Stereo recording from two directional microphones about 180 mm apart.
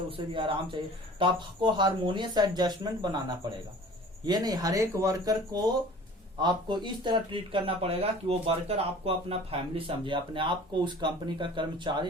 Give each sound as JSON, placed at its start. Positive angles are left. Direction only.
{"t": 0.3, "sound": "speech", "side_deg": -30}